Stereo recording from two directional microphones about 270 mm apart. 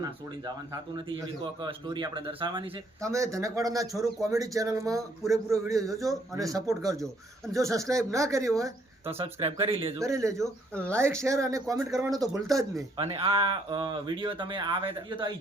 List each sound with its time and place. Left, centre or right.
0.0 s speech: centre